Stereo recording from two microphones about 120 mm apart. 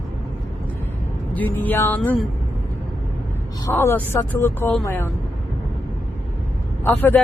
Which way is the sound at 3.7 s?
15° left (ahead or behind).